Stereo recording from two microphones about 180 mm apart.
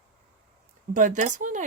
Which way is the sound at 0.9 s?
45° right (ahead or behind).